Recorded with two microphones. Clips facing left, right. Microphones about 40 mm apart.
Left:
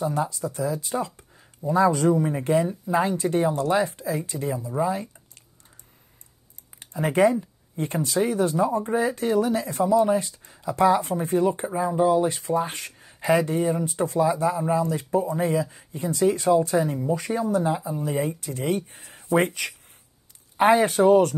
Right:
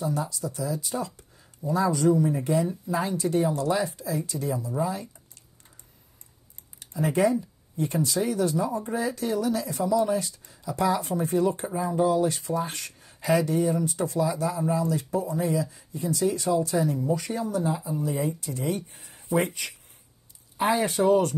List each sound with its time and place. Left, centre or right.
0.0 s speech: left
6.8 s speech: left
13.3 s speech: left